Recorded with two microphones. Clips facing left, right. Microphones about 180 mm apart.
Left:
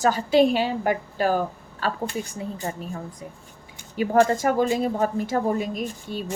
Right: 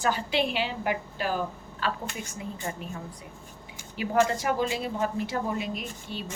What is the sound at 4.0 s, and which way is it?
A woman's voice, 45° left (ahead or behind).